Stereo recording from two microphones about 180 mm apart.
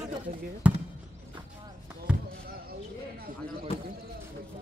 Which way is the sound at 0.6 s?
10° right (ahead or behind).